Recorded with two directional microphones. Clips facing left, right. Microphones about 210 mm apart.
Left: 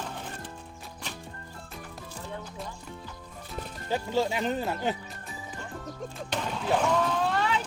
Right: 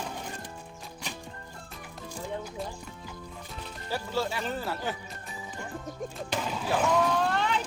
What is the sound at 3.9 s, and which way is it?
Speech, 20° left (ahead or behind).